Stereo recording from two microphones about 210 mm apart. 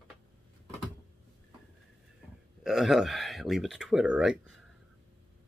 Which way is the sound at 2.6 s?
Centre (ahead or behind).